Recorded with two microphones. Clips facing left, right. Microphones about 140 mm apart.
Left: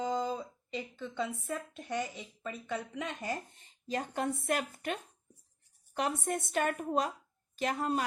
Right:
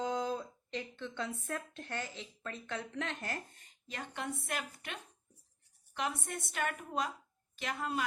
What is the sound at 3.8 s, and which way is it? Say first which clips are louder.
Speech: left 7 dB; 40° left (ahead or behind).